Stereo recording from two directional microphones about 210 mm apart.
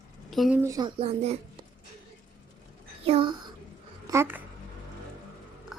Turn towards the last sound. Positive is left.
turn(degrees=0)  # may be behind; listen again after turning